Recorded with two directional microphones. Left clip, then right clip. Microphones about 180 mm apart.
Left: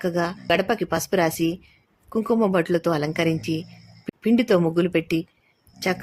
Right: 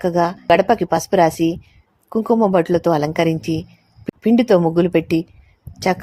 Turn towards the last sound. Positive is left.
turn(degrees=-20)  # may be behind; listen again after turning